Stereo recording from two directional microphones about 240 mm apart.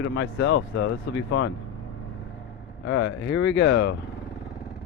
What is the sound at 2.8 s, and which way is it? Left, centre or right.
Speech, left.